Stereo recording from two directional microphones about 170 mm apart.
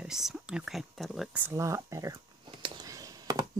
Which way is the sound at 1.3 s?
15° right (ahead or behind).